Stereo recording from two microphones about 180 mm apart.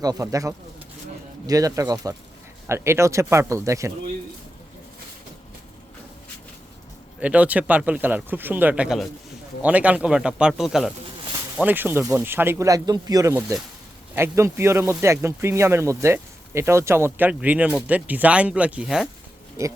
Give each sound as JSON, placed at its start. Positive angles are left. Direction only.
{"t": 0.0, "sound": "speech", "side_deg": -20}
{"t": 7.2, "sound": "speech", "side_deg": -10}